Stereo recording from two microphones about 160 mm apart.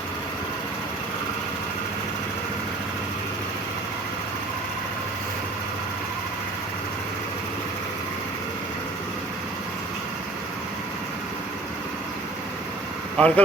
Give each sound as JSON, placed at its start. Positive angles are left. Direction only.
{"t": 13.1, "sound": "speech", "side_deg": 10}